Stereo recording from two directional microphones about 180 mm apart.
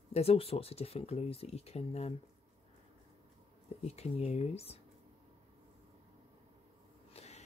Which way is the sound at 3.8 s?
35° left (ahead or behind).